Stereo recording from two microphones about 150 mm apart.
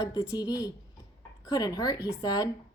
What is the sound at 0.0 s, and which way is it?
A woman's voice, 25° left (ahead or behind).